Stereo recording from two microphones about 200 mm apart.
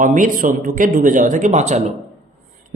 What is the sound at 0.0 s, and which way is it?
Speech, 40° right (ahead or behind).